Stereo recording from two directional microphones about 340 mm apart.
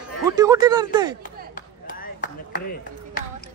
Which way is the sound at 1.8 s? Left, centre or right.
Left.